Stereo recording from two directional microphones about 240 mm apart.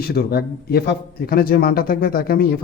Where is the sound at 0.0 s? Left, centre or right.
Left.